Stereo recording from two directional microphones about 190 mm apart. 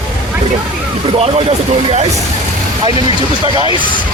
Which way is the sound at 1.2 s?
30° right (ahead or behind).